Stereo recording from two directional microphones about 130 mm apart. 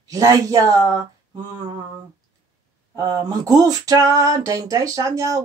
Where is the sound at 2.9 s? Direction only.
25° right (ahead or behind).